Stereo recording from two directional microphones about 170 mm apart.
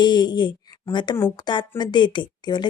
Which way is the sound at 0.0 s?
25° left (ahead or behind).